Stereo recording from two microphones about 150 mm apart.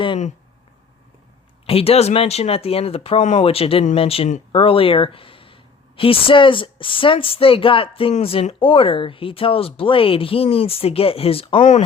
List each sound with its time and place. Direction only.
1.6 s speech: 40° left (ahead or behind)